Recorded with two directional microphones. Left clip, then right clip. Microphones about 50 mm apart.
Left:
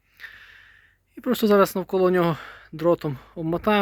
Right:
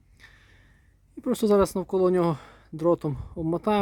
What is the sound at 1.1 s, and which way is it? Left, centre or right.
Speech, right.